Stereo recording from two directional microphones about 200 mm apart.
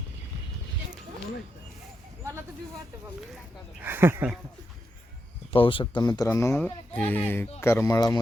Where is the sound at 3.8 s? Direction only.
10° right (ahead or behind).